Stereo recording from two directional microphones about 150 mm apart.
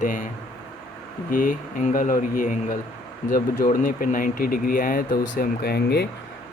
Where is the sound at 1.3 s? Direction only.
65° left (ahead or behind); by 6.1 s 90° left.